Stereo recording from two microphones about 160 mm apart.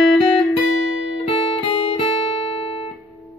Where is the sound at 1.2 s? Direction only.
35° left (ahead or behind).